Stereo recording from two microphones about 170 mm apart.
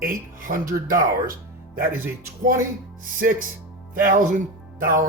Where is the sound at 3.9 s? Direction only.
55° right (ahead or behind).